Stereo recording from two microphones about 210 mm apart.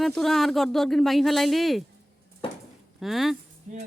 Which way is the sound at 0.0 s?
Centre (ahead or behind).